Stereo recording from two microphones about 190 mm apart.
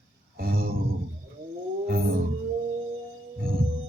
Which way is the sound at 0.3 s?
50° right (ahead or behind).